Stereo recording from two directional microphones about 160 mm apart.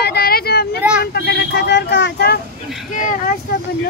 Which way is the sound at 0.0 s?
80° left.